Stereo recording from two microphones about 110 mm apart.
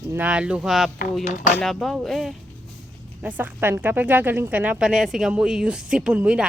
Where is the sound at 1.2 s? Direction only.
90° left.